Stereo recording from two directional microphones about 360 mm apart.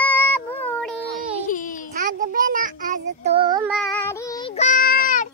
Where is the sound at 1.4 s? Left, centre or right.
Left.